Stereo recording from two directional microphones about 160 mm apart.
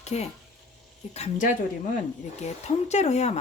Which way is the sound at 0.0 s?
45° left (ahead or behind).